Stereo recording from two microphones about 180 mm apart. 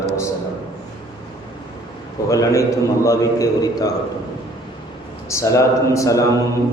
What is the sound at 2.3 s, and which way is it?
A man's voice, 20° left (ahead or behind).